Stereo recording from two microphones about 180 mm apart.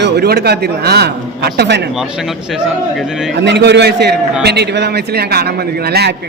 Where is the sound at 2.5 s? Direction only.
5° right (ahead or behind).